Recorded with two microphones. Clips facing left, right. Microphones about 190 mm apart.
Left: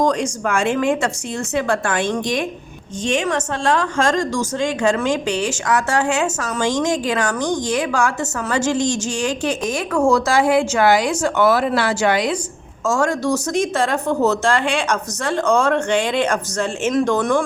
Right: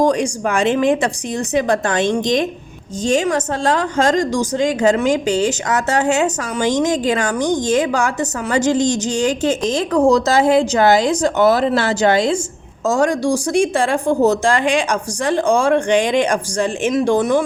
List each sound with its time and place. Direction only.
0.1 s a woman's voice: 15° right (ahead or behind)
3.0 s a woman's voice: 40° right (ahead or behind)
3.9 s a woman's voice: 20° right (ahead or behind)